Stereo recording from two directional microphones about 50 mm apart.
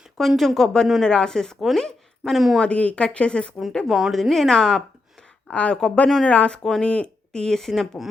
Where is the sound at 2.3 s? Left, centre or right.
Centre.